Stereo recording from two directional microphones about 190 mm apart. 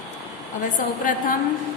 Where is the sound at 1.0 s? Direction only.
45° left (ahead or behind).